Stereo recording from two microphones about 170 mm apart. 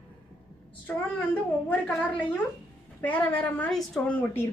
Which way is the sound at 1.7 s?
10° left (ahead or behind).